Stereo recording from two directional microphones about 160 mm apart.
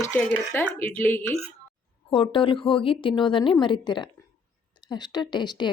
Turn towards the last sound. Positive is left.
turn(degrees=25)  # may be behind; listen again after turning